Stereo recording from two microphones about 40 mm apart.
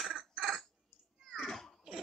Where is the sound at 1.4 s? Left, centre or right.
Centre.